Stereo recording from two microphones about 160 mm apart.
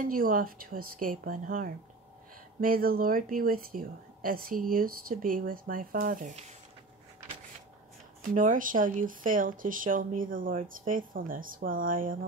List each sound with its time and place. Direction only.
0.0 s speech: 60° right (ahead or behind)
8.2 s speech: 55° right (ahead or behind)